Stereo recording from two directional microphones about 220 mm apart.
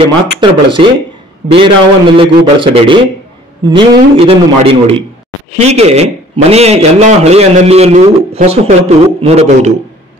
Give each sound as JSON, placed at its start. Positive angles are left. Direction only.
{"t": 0.4, "sound": "a man's voice", "side_deg": -20}